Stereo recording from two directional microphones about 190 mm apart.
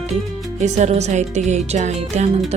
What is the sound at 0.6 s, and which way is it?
Music, 35° right (ahead or behind).